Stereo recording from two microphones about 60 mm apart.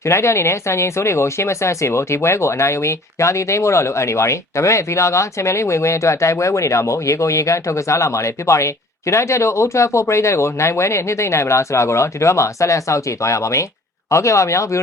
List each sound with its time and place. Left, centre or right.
0.0 s speech: left